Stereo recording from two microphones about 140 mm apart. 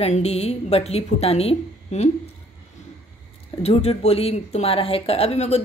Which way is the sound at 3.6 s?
45° left (ahead or behind).